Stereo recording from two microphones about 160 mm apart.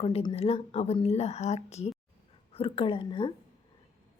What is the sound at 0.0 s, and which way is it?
Speech, 35° left (ahead or behind).